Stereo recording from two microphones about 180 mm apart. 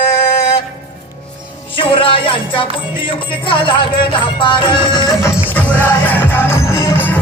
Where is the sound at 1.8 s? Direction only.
30° left (ahead or behind).